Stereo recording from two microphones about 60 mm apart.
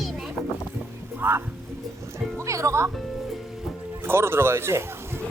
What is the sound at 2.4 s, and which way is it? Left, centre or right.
Music, right.